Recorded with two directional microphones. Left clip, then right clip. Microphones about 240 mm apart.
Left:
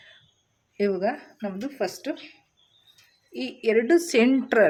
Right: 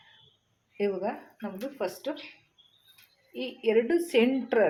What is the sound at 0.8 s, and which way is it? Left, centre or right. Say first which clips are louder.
Speech: left 5 dB; left.